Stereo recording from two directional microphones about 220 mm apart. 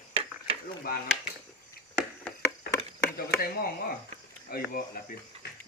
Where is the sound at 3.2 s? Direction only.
40° left (ahead or behind).